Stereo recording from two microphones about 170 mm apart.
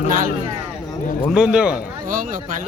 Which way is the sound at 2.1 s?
50° right (ahead or behind).